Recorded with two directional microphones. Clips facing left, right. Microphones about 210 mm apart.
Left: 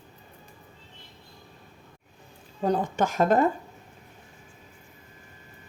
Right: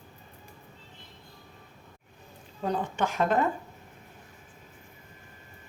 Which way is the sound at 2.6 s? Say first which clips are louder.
Left 4 dB; 40° left (ahead or behind).